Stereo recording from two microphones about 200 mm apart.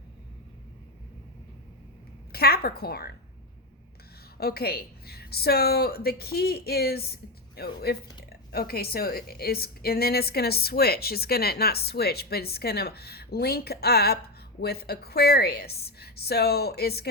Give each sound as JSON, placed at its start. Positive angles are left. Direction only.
{"t": 2.3, "sound": "a woman's voice", "side_deg": 50}
{"t": 4.4, "sound": "a woman's voice", "side_deg": 50}